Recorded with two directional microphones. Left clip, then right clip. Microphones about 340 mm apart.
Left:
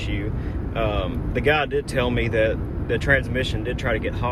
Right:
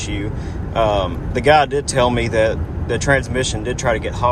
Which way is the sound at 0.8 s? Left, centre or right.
Centre.